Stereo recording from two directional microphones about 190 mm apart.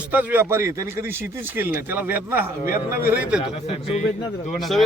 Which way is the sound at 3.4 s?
35° left (ahead or behind).